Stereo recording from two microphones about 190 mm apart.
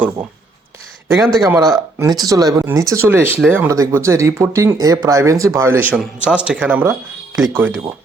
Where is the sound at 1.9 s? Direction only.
20° right (ahead or behind).